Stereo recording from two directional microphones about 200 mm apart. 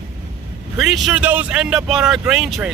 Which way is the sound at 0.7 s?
Centre (ahead or behind).